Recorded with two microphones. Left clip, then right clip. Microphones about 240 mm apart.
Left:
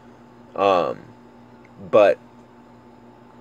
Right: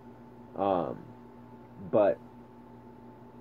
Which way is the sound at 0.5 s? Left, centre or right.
Centre.